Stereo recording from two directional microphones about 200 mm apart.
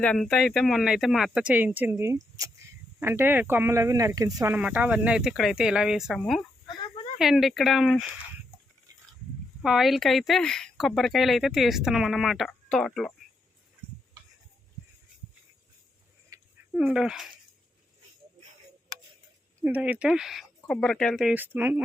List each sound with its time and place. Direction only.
0.0 s speech: 5° left (ahead or behind)
6.7 s a sound: 25° left (ahead or behind)
7.2 s speech: centre (ahead or behind)
8.9 s mechanisms: 15° right (ahead or behind)
9.6 s speech: centre (ahead or behind)
16.3 s a sound: 15° right (ahead or behind)
16.7 s speech: 5° right (ahead or behind)
19.6 s speech: 5° right (ahead or behind)